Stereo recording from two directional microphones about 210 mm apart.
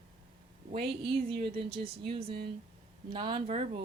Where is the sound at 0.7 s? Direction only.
25° right (ahead or behind).